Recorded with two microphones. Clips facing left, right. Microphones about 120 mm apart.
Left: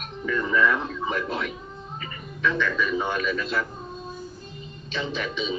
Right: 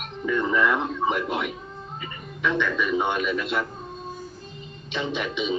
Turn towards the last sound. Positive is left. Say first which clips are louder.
# right 2 dB
turn(degrees=-15)  # may be behind; listen again after turning